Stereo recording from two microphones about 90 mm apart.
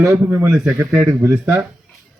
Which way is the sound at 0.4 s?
10° right (ahead or behind).